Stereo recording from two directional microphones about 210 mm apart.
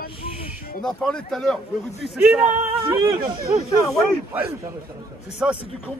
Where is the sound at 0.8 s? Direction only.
Centre (ahead or behind).